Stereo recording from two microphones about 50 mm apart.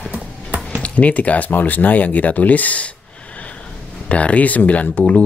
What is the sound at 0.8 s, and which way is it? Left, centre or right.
Speech, left.